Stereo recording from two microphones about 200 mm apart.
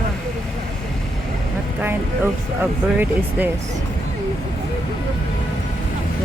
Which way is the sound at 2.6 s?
10° right (ahead or behind).